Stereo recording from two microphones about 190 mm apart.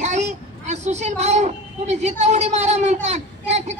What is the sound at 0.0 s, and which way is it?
A child's voice, 35° right (ahead or behind).